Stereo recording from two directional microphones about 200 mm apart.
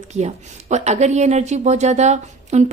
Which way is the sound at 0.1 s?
35° right (ahead or behind).